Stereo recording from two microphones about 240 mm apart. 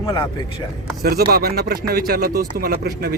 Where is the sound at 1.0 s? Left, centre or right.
Right.